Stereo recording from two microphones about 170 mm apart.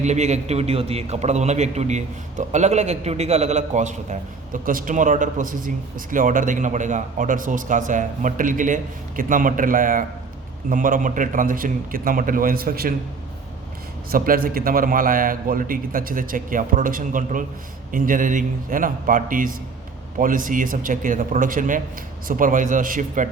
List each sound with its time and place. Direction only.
0.0 s a man's voice: 40° right (ahead or behind); by 12.9 s 60° right (ahead or behind)
14.1 s a man's voice: 60° right (ahead or behind)